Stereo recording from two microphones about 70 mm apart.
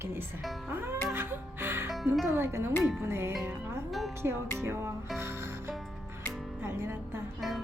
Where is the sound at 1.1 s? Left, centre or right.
Right.